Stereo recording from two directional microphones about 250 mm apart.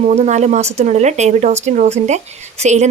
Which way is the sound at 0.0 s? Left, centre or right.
Right.